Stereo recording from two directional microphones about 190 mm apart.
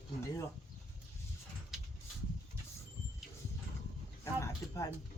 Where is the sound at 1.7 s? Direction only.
Centre (ahead or behind).